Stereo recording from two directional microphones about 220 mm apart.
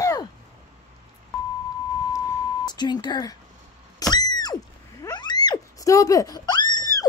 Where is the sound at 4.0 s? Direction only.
20° left (ahead or behind).